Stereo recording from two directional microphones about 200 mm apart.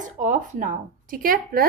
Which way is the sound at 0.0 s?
40° right (ahead or behind).